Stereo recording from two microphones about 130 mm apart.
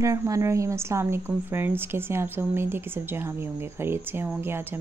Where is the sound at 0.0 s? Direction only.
25° right (ahead or behind).